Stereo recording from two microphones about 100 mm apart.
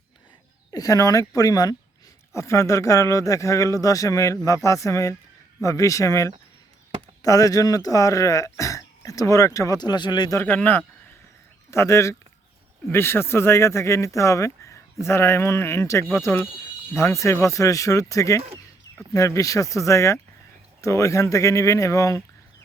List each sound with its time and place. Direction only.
0.7 s speech: 35° left (ahead or behind)
2.3 s speech: 30° left (ahead or behind); by 10.3 s 45° left (ahead or behind)
10.4 s speech: 20° left (ahead or behind); by 22.2 s 35° left (ahead or behind)